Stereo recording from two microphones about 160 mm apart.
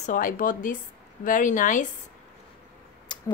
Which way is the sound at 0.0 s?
55° left (ahead or behind).